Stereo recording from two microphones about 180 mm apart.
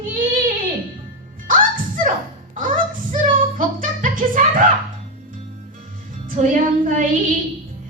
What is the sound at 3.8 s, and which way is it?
Music, 45° right (ahead or behind).